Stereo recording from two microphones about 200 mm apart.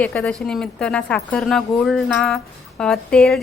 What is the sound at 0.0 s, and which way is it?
A woman's voice, 5° left (ahead or behind).